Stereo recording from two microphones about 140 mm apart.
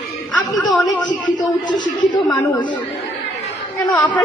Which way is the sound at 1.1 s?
30° left (ahead or behind).